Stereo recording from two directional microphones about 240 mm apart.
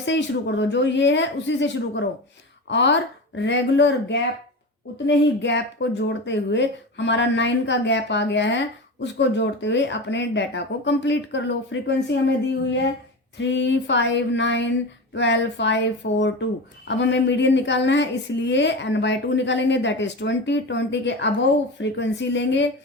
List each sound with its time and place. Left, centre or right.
0.0 s a woman's voice: left
13.4 s a woman's voice: left